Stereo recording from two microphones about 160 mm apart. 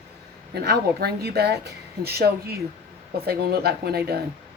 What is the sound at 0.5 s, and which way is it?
Speech, 85° right.